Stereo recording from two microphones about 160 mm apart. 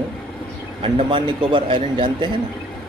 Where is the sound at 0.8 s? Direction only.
30° right (ahead or behind).